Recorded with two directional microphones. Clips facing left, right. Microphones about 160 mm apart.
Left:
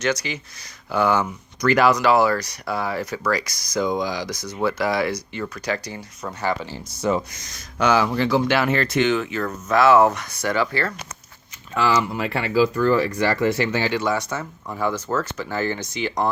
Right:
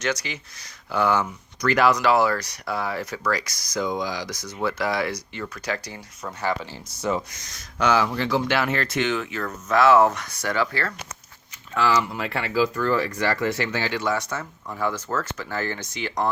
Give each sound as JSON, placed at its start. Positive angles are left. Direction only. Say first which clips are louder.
{"t": 0.0, "sound": "speech", "louder": "left 4 dB", "side_deg": 0}
{"t": 0.9, "sound": "speech", "louder": "left 2 dB", "side_deg": 10}
{"t": 3.8, "sound": "speech", "louder": "left 4 dB", "side_deg": 35}
{"t": 4.0, "sound": "speech", "louder": "left 3 dB", "side_deg": 20}
{"t": 7.8, "sound": "speech", "louder": "left 2 dB", "side_deg": 10}
{"t": 13.1, "sound": "speech", "louder": "left 4 dB", "side_deg": 20}